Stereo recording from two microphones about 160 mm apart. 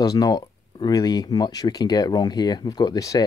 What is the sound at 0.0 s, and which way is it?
Speech, 25° left (ahead or behind).